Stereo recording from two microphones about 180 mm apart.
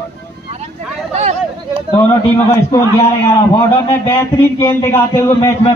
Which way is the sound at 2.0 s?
10° left (ahead or behind).